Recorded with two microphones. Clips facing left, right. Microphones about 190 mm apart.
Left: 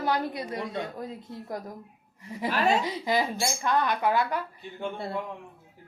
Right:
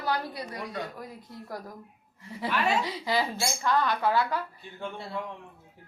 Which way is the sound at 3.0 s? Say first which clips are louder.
Left 2 dB; 20° left (ahead or behind).